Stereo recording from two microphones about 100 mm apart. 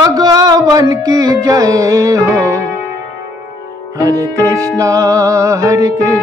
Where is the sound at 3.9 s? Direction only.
35° right (ahead or behind).